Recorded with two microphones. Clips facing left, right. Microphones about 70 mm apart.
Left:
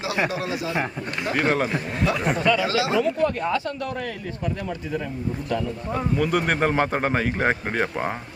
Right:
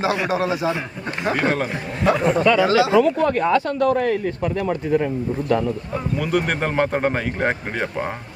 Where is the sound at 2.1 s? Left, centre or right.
Right.